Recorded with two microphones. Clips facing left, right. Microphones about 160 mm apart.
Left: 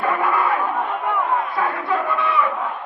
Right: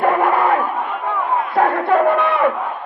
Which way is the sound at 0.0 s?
55° right (ahead or behind).